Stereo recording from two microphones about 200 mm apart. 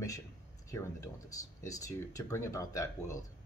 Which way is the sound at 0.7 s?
15° left (ahead or behind).